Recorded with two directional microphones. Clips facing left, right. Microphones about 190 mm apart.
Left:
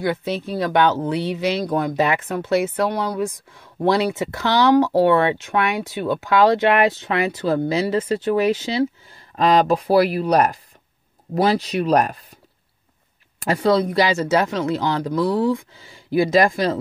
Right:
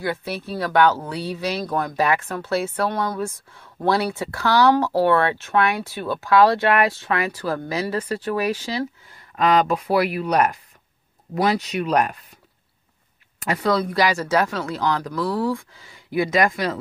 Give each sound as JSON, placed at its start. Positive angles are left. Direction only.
{"t": 0.0, "sound": "speech", "side_deg": 20}
{"t": 13.4, "sound": "speech", "side_deg": 30}